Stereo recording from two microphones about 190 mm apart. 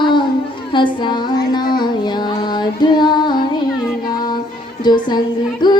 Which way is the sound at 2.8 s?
25° left (ahead or behind).